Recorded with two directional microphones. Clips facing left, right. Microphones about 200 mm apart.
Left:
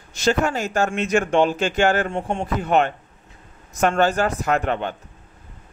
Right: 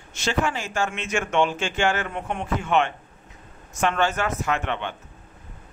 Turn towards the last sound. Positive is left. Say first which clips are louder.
# left 5 dB
turn(degrees=40)  # may be behind; listen again after turning